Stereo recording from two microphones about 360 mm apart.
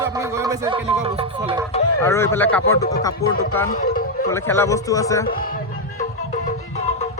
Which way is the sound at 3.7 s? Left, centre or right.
Left.